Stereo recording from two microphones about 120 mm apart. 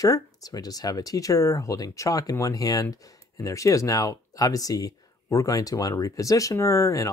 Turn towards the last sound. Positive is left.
turn(degrees=25)  # may be behind; listen again after turning